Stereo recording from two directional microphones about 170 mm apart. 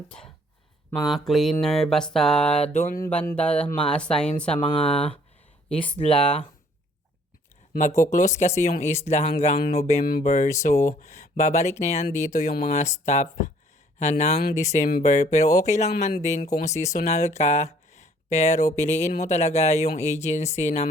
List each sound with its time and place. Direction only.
1.0 s a sound: centre (ahead or behind)
2.6 s speech: 40° left (ahead or behind)
3.1 s speech: 10° left (ahead or behind)
3.8 s a sound: 5° left (ahead or behind)
4.4 s speech: 5° left (ahead or behind)
6.1 s a sound: 5° left (ahead or behind)
7.7 s speech: 50° left (ahead or behind)
10.0 s speech: 60° left (ahead or behind)
10.2 s speech: 45° left (ahead or behind)